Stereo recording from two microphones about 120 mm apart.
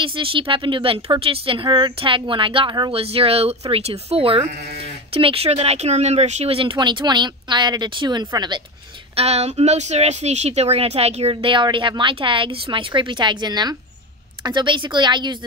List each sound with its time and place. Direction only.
0.0 s speech: 45° right (ahead or behind)
2.9 s speech: 55° right (ahead or behind); by 8.5 s 35° right (ahead or behind)
9.1 s speech: 60° right (ahead or behind)
11.5 s a woman's voice: 45° right (ahead or behind)